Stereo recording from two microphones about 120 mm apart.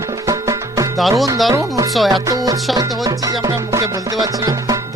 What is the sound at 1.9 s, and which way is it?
Speech, centre (ahead or behind).